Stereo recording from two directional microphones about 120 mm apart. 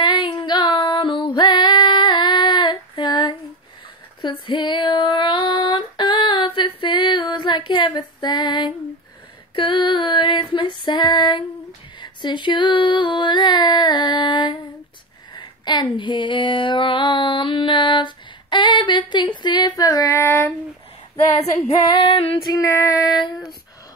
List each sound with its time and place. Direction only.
0.0 s female singing: 40° left (ahead or behind)
12.0 s a sound: 40° left (ahead or behind); by 20.5 s 20° left (ahead or behind)
21.4 s female singing: 60° left (ahead or behind)
22.5 s child singing: 25° left (ahead or behind)